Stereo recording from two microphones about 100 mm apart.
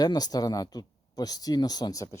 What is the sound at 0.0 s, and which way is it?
Speech, 40° left (ahead or behind).